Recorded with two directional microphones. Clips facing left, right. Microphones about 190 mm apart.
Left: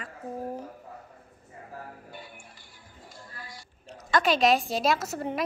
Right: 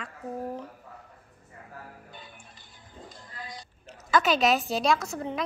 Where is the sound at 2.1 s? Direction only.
20° right (ahead or behind).